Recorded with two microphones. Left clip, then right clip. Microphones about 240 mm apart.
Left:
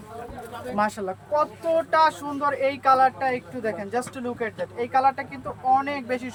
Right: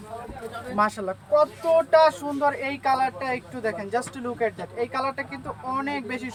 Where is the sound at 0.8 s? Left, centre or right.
Centre.